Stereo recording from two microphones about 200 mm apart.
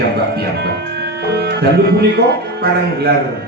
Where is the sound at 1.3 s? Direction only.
55° right (ahead or behind).